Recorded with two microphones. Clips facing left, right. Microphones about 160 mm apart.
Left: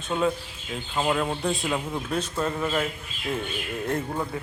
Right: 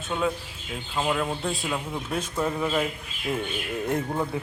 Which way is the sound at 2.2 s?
10° right (ahead or behind).